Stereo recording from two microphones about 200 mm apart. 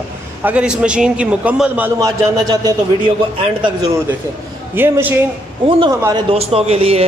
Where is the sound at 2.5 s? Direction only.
20° right (ahead or behind).